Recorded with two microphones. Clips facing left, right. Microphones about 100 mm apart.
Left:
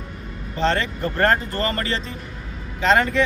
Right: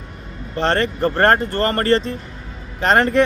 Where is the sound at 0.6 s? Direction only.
60° right (ahead or behind).